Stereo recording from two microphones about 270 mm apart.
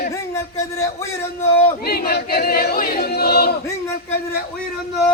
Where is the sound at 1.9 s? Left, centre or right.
Left.